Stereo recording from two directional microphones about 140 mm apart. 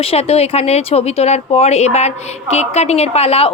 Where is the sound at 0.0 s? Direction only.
45° left (ahead or behind).